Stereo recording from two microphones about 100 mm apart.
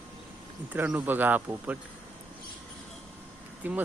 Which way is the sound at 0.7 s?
20° right (ahead or behind).